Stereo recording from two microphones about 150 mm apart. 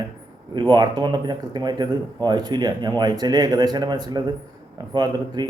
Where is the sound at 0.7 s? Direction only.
30° right (ahead or behind).